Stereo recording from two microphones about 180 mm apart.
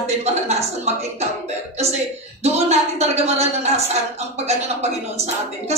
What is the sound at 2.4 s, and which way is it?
Speech, 35° right (ahead or behind).